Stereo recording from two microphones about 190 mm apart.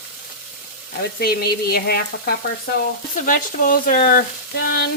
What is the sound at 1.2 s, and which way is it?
Frying, 55° left (ahead or behind).